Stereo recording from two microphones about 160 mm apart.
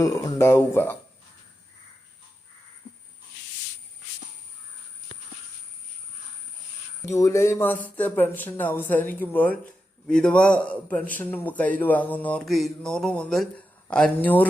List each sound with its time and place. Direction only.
0.0 s a man's voice: 20° left (ahead or behind)
7.1 s a man's voice: 20° left (ahead or behind)